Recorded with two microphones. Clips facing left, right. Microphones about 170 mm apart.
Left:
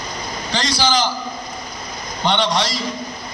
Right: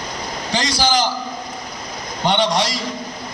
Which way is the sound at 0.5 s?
45° right (ahead or behind).